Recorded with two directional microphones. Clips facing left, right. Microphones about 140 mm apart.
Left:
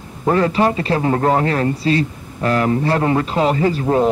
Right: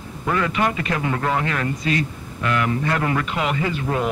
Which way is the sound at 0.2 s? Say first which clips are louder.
Left 6 dB; 35° left (ahead or behind).